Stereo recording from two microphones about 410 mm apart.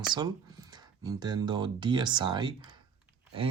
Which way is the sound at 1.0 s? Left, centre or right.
Centre.